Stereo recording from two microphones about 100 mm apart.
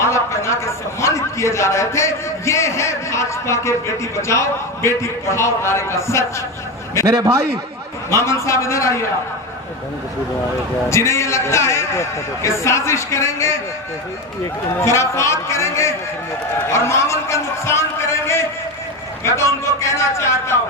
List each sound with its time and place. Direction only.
0.0 s a man's voice: 30° left (ahead or behind)
7.0 s a man's voice: 35° right (ahead or behind)
8.1 s a man's voice: 30° left (ahead or behind)
10.8 s a man's voice: 30° left (ahead or behind)
14.8 s a man's voice: 30° left (ahead or behind)
19.2 s a man's voice: 30° left (ahead or behind)